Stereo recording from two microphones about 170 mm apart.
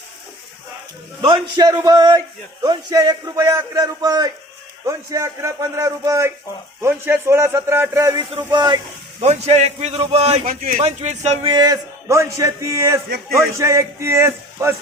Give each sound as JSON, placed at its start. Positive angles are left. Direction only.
{"t": 1.2, "sound": "a man's voice", "side_deg": -25}
{"t": 9.2, "sound": "a man's voice", "side_deg": -40}
{"t": 10.4, "sound": "speech", "side_deg": -55}
{"t": 10.8, "sound": "a man's voice", "side_deg": -40}
{"t": 11.5, "sound": "a man's voice", "side_deg": -20}